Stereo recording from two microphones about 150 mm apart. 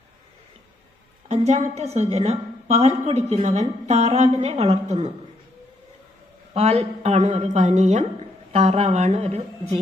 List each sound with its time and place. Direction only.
1.3 s a woman's voice: 45° right (ahead or behind)
6.5 s a woman's voice: 45° right (ahead or behind)